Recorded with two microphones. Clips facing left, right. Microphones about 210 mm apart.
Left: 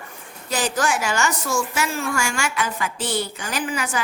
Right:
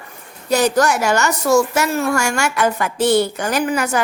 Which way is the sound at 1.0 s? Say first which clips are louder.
Right 7 dB; 65° right (ahead or behind).